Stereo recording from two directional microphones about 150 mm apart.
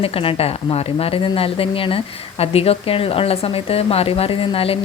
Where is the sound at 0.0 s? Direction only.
40° left (ahead or behind).